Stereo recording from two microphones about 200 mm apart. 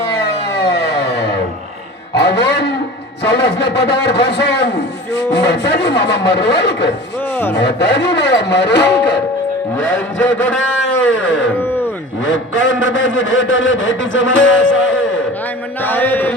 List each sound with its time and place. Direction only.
0.1 s music: 60° left (ahead or behind)
2.1 s dog: 60° left (ahead or behind)
3.2 s a man's voice: 60° left (ahead or behind)
9.7 s a man's voice: 70° left (ahead or behind)
11.6 s a sound: 10° left (ahead or behind)
12.2 s a man's voice: 75° left (ahead or behind)
15.8 s mantra: 10° left (ahead or behind)